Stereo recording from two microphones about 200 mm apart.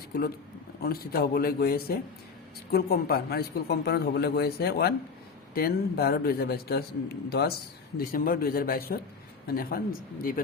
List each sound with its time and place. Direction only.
0.1 s a man's voice: 50° left (ahead or behind)